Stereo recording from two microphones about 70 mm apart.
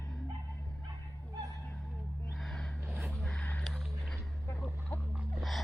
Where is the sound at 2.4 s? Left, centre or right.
Centre.